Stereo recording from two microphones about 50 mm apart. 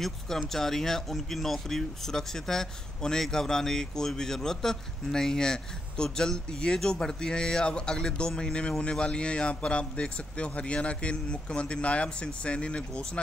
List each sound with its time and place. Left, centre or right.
0.5 s a man's voice: centre